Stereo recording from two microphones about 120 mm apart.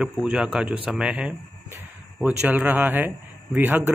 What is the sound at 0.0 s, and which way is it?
A man's voice, 5° right (ahead or behind).